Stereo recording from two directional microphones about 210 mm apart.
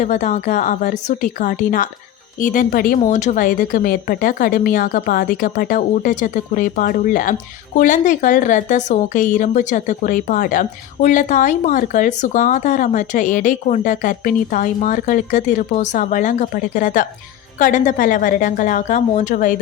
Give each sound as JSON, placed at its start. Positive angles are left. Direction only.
{"t": 0.0, "sound": "a woman's voice", "side_deg": 35}